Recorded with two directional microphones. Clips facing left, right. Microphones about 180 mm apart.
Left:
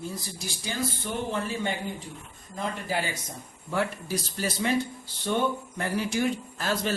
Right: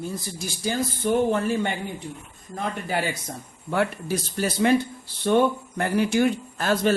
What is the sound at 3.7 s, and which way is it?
Speech, 60° right (ahead or behind).